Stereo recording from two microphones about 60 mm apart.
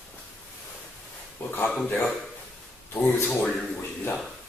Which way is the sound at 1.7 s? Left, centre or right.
Centre.